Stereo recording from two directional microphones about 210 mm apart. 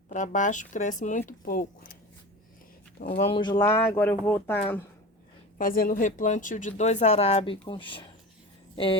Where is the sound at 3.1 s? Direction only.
25° left (ahead or behind); by 4.6 s 10° left (ahead or behind).